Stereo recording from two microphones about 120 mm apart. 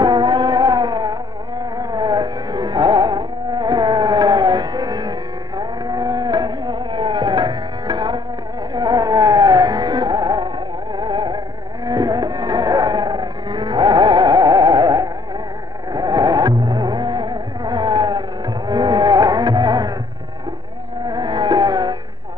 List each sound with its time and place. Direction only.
0.0 s music: 35° right (ahead or behind)
5.6 s a sound: 35° right (ahead or behind)
8.7 s music: 30° right (ahead or behind)
21.0 s music: 35° right (ahead or behind)